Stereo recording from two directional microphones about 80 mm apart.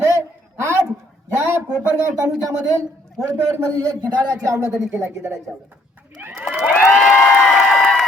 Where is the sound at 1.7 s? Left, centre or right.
Centre.